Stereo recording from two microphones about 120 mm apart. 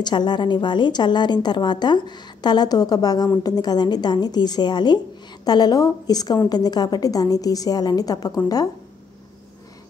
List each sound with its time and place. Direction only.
0.0 s a woman's voice: 35° left (ahead or behind)